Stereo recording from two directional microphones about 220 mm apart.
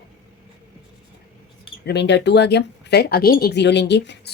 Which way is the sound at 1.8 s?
50° left (ahead or behind).